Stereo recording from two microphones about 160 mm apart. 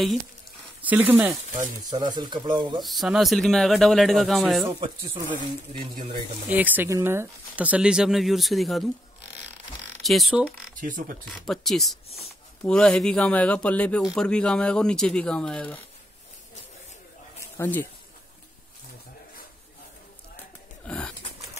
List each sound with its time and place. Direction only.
0.8 s speech: 10° right (ahead or behind)
1.9 s speech: 25° right (ahead or behind)
2.8 s speech: centre (ahead or behind)
4.7 s speech: 35° right (ahead or behind)
6.5 s speech: 10° right (ahead or behind)
10.0 s speech: centre (ahead or behind)
10.8 s speech: 60° right (ahead or behind)
11.2 s speech: centre (ahead or behind)
17.4 s a sound: 15° left (ahead or behind)
20.8 s pigeon: 5° left (ahead or behind)